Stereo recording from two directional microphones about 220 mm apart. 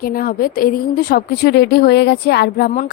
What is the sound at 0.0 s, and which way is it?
A woman's voice, 40° left (ahead or behind).